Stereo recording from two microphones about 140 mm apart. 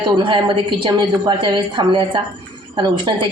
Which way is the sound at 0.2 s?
35° right (ahead or behind).